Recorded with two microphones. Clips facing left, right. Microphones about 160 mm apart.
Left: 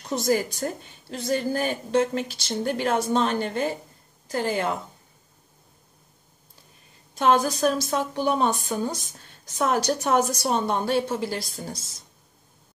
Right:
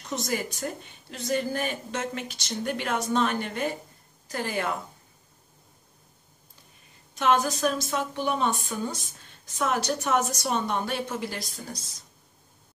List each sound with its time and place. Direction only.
0.0 s a woman's voice: 35° left (ahead or behind)
7.2 s a woman's voice: 35° left (ahead or behind)